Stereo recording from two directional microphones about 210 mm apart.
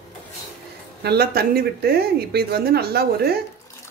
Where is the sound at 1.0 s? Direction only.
50° right (ahead or behind).